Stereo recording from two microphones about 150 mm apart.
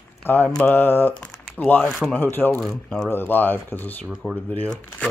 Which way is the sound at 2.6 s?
5° left (ahead or behind).